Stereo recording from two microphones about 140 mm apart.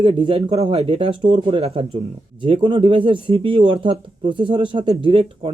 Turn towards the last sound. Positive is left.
turn(degrees=-40)  # may be behind; listen again after turning